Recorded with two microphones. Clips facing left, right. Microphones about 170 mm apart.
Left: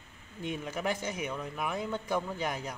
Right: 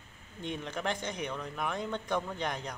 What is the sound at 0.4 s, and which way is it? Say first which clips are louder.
Speech: left 2 dB; 5° left (ahead or behind).